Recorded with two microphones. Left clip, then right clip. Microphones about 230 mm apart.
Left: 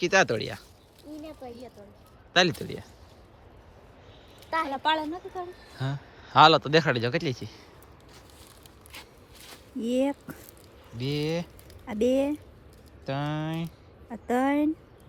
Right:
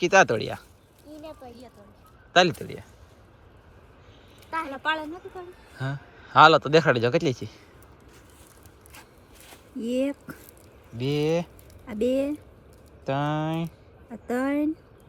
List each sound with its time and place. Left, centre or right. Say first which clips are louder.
0.0 s speech: right 4 dB; centre
1.2 s a sound: even; left
2.3 s speech: right 3 dB; centre
4.5 s speech: left 2 dB; left
5.7 s speech: right 4 dB; centre
9.0 s a sound: left 3 dB; centre
10.0 s speech: even; centre